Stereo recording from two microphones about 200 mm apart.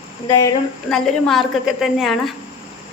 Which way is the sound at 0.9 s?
Centre (ahead or behind).